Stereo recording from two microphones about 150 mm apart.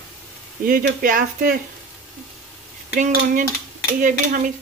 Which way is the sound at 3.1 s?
65° right (ahead or behind).